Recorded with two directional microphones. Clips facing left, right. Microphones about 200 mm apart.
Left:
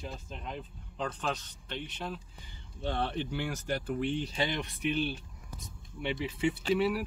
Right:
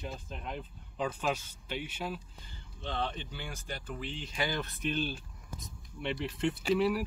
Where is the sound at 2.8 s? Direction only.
65° left (ahead or behind).